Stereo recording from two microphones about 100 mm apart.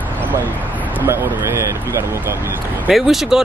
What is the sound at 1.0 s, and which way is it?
Speech, 20° right (ahead or behind).